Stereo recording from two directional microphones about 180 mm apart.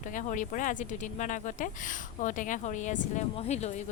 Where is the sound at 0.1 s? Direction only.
45° left (ahead or behind).